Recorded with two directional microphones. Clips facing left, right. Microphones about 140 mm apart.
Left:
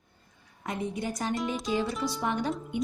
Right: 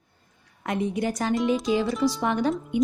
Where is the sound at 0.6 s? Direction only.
85° right.